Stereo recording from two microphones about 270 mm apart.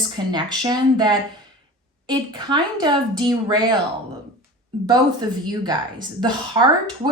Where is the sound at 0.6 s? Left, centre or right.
Centre.